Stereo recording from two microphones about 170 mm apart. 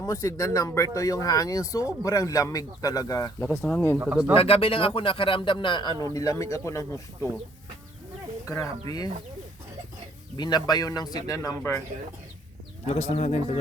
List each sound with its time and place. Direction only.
0.0 s speech: 20° left (ahead or behind)
3.9 s speech: 10° right (ahead or behind)
4.4 s speech: 35° left (ahead or behind); by 7.3 s 15° left (ahead or behind)
8.4 s speech: 15° left (ahead or behind)
10.3 s speech: 25° left (ahead or behind)
12.9 s speech: 40° left (ahead or behind)